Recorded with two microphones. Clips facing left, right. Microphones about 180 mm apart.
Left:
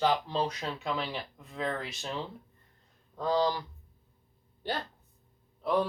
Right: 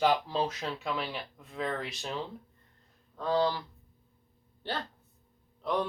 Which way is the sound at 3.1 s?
15° left (ahead or behind).